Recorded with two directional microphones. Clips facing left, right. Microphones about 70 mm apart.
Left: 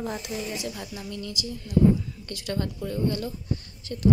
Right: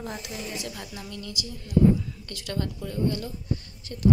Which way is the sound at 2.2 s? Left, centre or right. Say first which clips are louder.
Left 3 dB; left.